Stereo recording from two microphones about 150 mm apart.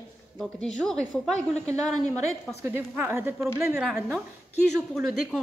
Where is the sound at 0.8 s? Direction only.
5° left (ahead or behind).